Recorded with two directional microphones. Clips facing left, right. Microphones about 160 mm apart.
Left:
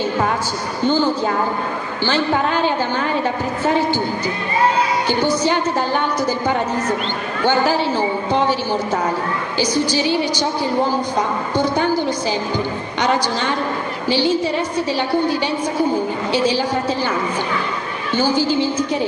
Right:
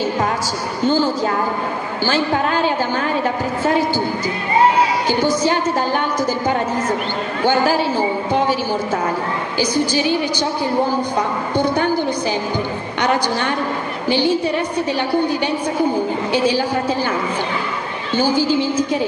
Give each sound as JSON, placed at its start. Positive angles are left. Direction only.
{"t": 5.5, "sound": "a woman's voice", "side_deg": -45}
{"t": 7.4, "sound": "a woman's voice", "side_deg": -10}
{"t": 14.0, "sound": "a woman's voice", "side_deg": -15}
{"t": 18.1, "sound": "a woman's voice", "side_deg": -10}